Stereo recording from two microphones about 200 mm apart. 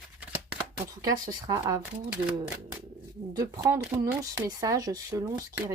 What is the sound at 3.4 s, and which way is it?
Speech, 15° right (ahead or behind).